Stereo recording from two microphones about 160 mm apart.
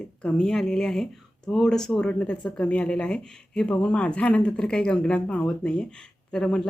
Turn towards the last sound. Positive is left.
turn(degrees=5)  # may be behind; listen again after turning